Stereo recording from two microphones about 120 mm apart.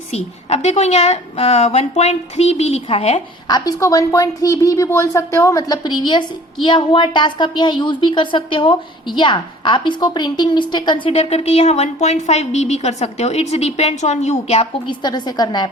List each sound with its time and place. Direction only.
0.1 s a woman's voice: 60° left (ahead or behind)
3.5 s a woman's voice: 30° left (ahead or behind); by 14.7 s 65° left (ahead or behind)
14.8 s a woman's voice: 35° left (ahead or behind)